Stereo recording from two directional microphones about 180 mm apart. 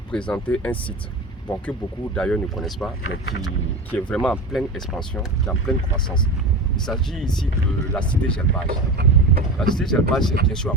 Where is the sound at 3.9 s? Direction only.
5° left (ahead or behind).